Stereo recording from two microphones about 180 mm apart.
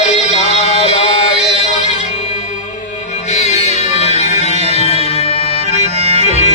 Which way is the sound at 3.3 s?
40° left (ahead or behind).